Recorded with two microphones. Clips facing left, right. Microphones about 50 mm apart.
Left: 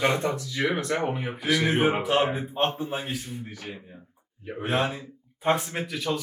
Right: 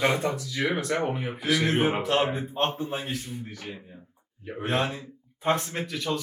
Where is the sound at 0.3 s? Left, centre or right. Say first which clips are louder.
Left 1 dB; left.